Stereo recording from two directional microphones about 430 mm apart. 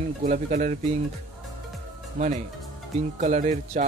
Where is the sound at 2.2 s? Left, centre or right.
Centre.